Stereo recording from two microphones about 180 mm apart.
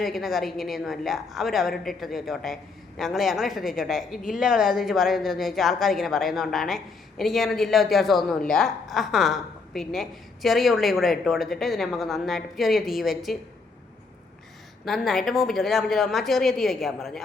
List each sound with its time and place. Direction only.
0.0 s speech: centre (ahead or behind)
14.8 s speech: centre (ahead or behind)